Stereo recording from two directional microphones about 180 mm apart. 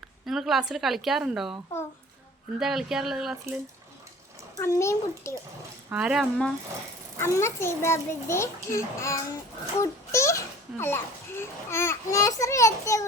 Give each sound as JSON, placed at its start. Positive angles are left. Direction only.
{"t": 0.3, "sound": "a woman's voice", "side_deg": 0}
{"t": 2.6, "sound": "speech", "side_deg": 0}
{"t": 4.5, "sound": "a child's voice", "side_deg": 15}
{"t": 5.9, "sound": "speech", "side_deg": -5}
{"t": 7.2, "sound": "a child's voice", "side_deg": 15}